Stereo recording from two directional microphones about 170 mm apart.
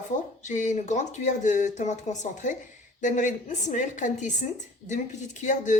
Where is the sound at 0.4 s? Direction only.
45° left (ahead or behind).